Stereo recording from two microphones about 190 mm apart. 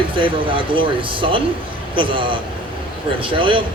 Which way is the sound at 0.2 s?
25° right (ahead or behind).